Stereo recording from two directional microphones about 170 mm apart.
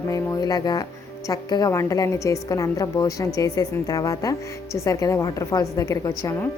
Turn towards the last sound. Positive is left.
turn(degrees=15)  # may be behind; listen again after turning